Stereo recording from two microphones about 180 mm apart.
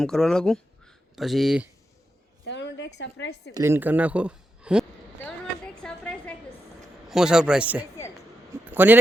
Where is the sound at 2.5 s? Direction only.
80° left.